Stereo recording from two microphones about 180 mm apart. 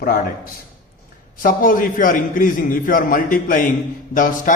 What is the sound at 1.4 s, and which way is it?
A man's voice, 50° left (ahead or behind).